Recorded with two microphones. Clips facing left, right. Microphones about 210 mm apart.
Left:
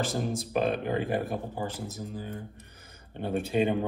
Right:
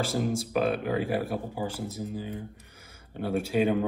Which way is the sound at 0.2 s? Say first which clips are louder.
Right 3 dB; 5° right (ahead or behind).